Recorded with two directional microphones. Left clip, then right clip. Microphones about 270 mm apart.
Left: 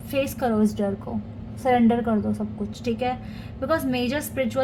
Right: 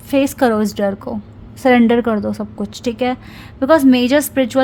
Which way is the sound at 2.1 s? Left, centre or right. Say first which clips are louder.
Right 7 dB; right.